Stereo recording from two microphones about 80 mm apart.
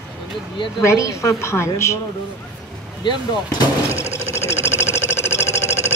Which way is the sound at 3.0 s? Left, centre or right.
Left.